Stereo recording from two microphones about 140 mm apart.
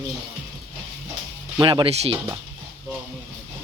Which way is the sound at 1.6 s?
35° right (ahead or behind).